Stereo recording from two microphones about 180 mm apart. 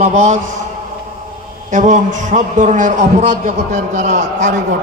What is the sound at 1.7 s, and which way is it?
A man's voice, 45° right (ahead or behind).